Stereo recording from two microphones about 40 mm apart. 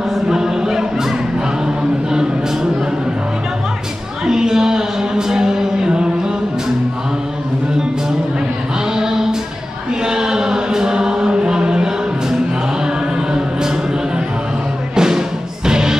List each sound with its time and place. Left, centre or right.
0.3 s choir: centre
4.3 s music: centre
8.9 s a sound: centre
10.0 s chant: centre
12.8 s music: centre
15.0 s music: centre